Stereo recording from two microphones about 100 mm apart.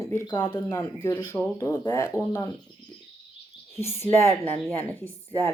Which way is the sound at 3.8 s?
25° left (ahead or behind).